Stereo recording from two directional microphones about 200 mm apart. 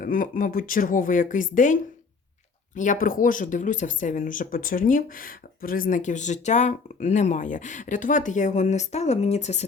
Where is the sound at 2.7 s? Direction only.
40° left (ahead or behind).